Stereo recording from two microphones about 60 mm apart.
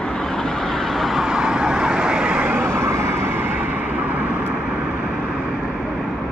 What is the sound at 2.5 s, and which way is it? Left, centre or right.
Vehicle, right.